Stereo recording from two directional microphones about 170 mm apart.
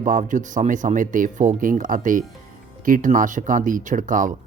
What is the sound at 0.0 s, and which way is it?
Speech, 50° right (ahead or behind).